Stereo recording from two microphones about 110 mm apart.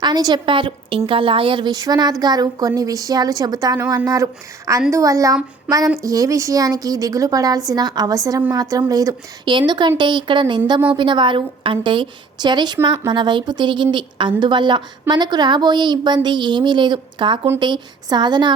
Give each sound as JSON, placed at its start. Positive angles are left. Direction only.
{"t": 0.0, "sound": "a woman's voice", "side_deg": -40}
{"t": 9.5, "sound": "a woman's voice", "side_deg": -45}